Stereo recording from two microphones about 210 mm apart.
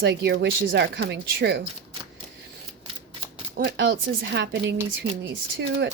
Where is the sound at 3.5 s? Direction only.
55° right (ahead or behind).